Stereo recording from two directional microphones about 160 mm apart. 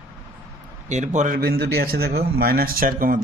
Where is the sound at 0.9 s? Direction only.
50° right (ahead or behind).